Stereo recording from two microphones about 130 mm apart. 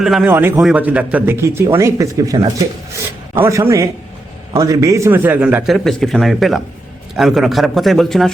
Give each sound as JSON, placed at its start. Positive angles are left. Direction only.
{"t": 0.0, "sound": "a man's voice", "side_deg": -5}
{"t": 0.3, "sound": "a man's voice", "side_deg": -15}
{"t": 5.6, "sound": "a man's voice", "side_deg": 0}